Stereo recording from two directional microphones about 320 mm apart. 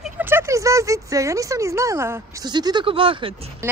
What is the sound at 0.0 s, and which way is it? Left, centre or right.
Speech, centre.